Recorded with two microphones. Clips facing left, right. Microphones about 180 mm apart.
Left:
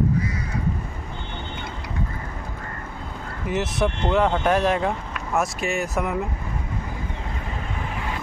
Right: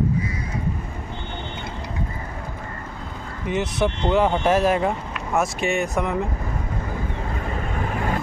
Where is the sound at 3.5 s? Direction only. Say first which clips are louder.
Right 1 dB; centre (ahead or behind).